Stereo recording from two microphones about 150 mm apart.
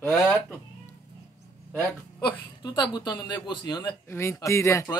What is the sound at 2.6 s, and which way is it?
Speech, 30° left (ahead or behind).